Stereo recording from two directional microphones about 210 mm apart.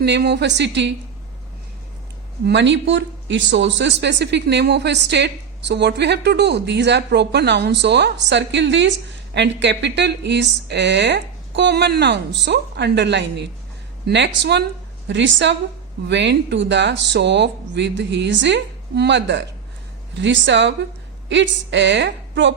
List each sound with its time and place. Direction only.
0.0 s speech: 55° right (ahead or behind)
2.5 s speech: 55° right (ahead or behind)